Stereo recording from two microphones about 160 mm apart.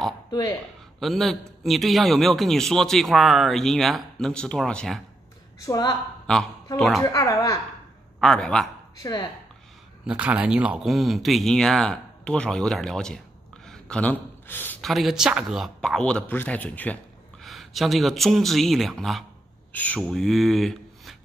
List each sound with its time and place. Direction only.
0.3 s speech: 25° left (ahead or behind)
0.9 s speech: centre (ahead or behind)
5.7 s speech: 25° left (ahead or behind)
7.0 s speech: 20° left (ahead or behind)
8.2 s speech: 5° left (ahead or behind)
9.0 s speech: 25° left (ahead or behind)
10.0 s speech: 10° right (ahead or behind)
13.7 s a sound: 5° left (ahead or behind)
14.8 s speech: centre (ahead or behind)